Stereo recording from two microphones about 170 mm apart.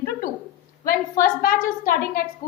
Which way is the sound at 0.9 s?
55° left (ahead or behind).